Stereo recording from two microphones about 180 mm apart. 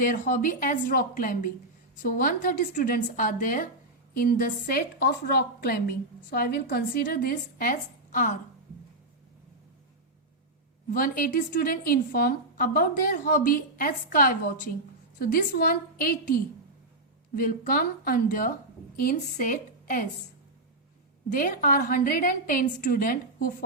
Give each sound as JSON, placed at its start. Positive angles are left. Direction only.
{"t": 0.0, "sound": "a woman's voice", "side_deg": 50}
{"t": 4.9, "sound": "speech", "side_deg": 65}
{"t": 10.9, "sound": "a woman's voice", "side_deg": 50}
{"t": 21.2, "sound": "a woman's voice", "side_deg": 50}